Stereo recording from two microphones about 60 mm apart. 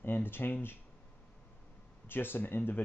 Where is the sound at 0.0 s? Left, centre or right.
Left.